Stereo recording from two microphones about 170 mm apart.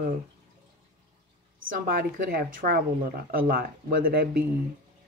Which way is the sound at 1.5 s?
55° right (ahead or behind).